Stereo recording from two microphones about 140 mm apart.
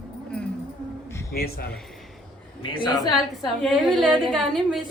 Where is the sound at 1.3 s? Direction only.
90° left.